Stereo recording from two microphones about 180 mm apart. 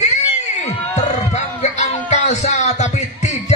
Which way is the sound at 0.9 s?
40° left (ahead or behind).